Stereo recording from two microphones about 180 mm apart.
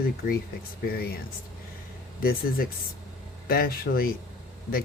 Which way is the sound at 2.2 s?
55° left (ahead or behind).